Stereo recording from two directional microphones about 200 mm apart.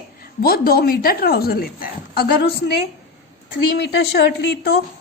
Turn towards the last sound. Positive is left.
turn(degrees=55)  # may be behind; listen again after turning